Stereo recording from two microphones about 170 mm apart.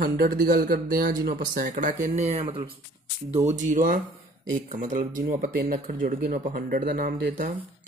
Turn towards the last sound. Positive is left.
turn(degrees=-55)  # may be behind; listen again after turning